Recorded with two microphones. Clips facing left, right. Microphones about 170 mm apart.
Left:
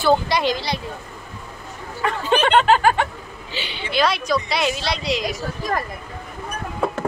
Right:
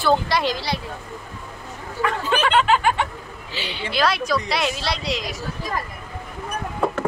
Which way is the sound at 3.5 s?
Centre (ahead or behind).